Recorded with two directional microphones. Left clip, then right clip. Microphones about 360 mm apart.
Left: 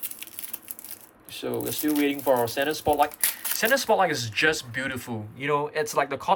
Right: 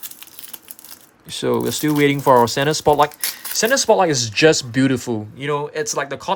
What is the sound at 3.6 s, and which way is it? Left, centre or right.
Speech, centre.